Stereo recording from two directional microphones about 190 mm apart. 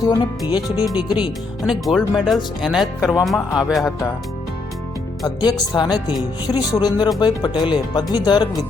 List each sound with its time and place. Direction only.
0.0 s speech: 20° left (ahead or behind)
1.6 s speech: centre (ahead or behind)
5.2 s speech: 20° left (ahead or behind)